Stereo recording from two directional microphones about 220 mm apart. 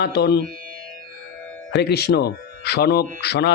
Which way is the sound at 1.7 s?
50° left (ahead or behind).